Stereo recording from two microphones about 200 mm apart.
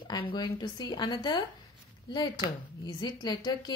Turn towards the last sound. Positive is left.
turn(degrees=20)  # may be behind; listen again after turning